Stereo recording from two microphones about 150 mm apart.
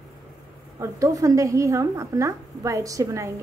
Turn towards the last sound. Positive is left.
turn(degrees=-20)  # may be behind; listen again after turning